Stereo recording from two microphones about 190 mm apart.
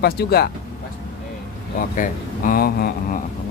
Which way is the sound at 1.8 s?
45° left (ahead or behind).